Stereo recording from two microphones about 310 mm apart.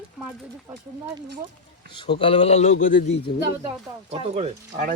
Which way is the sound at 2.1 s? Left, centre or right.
Centre.